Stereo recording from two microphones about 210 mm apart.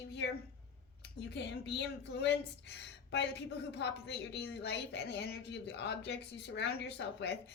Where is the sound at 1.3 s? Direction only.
55° left (ahead or behind).